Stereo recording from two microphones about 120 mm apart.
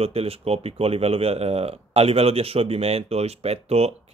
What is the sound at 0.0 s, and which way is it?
Speech, 55° right (ahead or behind).